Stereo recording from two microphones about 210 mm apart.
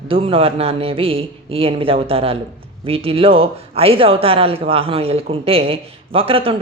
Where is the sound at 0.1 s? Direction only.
25° right (ahead or behind).